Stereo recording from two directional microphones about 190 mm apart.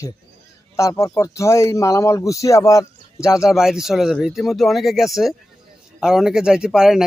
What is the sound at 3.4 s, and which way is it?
Speech, centre (ahead or behind).